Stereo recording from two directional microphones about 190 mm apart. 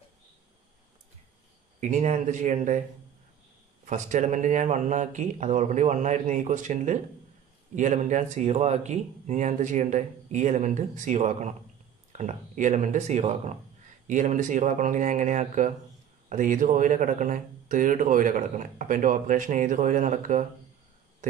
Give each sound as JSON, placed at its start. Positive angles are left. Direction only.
{"t": 1.8, "sound": "speech", "side_deg": -40}
{"t": 3.8, "sound": "speech", "side_deg": -40}